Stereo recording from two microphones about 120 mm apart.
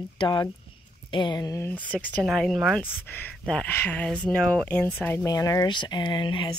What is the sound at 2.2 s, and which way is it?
Speech, centre (ahead or behind).